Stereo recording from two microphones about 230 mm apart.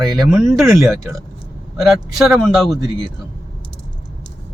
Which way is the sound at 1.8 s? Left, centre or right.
Centre.